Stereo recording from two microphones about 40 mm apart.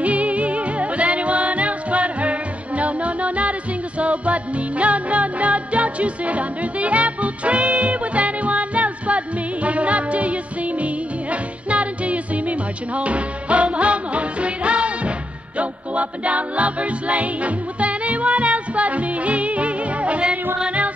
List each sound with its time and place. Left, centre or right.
0.0 s music: right